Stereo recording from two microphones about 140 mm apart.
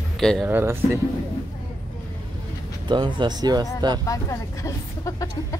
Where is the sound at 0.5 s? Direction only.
15° right (ahead or behind).